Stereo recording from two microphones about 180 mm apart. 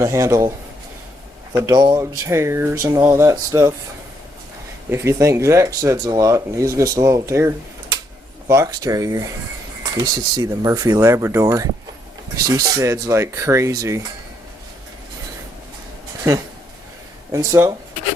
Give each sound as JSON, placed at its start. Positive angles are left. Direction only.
{"t": 0.0, "sound": "speech", "side_deg": -15}
{"t": 1.5, "sound": "speech", "side_deg": -20}
{"t": 4.9, "sound": "speech", "side_deg": -15}
{"t": 17.3, "sound": "speech", "side_deg": -20}